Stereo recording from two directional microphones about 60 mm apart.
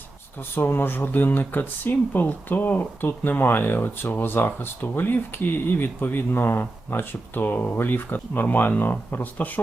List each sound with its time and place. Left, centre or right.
0.5 s speech: left